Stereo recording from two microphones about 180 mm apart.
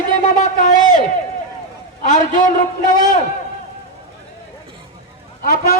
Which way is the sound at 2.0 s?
50° left (ahead or behind).